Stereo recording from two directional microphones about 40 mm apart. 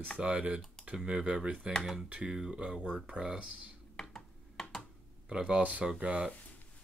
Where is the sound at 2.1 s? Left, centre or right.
Right.